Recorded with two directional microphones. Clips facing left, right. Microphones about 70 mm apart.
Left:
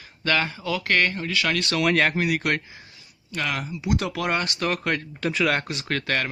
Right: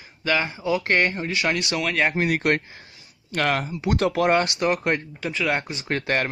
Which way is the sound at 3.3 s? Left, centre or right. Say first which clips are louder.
Right 5 dB; right.